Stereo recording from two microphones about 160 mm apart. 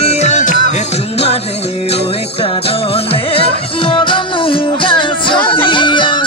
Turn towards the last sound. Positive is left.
turn(degrees=30)  # may be behind; listen again after turning